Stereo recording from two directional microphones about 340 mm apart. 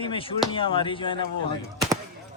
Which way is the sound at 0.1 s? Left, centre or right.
Centre.